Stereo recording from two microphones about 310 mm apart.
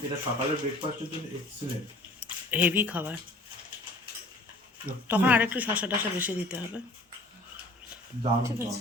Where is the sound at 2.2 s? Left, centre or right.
Centre.